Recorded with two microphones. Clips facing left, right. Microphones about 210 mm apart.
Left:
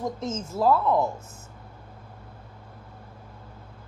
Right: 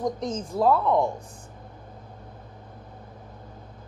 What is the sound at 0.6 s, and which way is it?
Speech, 5° left (ahead or behind).